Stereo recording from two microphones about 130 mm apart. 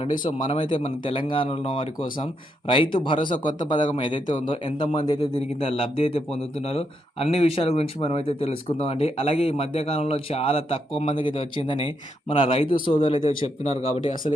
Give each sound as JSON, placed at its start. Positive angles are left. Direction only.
{"t": 0.4, "sound": "speech", "side_deg": 40}
{"t": 5.4, "sound": "speech", "side_deg": 45}
{"t": 13.7, "sound": "speech", "side_deg": 55}